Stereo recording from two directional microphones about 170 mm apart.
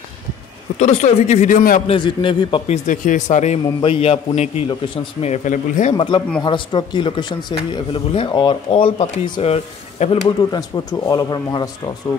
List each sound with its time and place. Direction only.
0.7 s speech: 45° left (ahead or behind)
1.9 s speech: 30° left (ahead or behind)
2.9 s a man's voice: 45° left (ahead or behind)
5.9 s a man's voice: 30° left (ahead or behind)
10.2 s speech: 20° left (ahead or behind)